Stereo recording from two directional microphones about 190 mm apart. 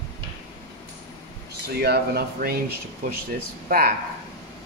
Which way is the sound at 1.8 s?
55° right (ahead or behind).